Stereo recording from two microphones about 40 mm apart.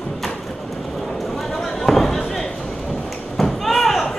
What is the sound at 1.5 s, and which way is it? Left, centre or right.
Fireworks, centre.